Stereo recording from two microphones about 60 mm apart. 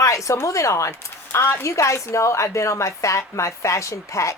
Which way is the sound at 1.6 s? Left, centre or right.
Left.